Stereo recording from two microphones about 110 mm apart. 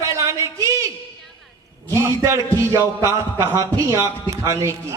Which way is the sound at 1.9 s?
25° right (ahead or behind).